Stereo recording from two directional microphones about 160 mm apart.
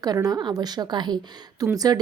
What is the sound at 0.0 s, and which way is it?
Speech, 25° right (ahead or behind).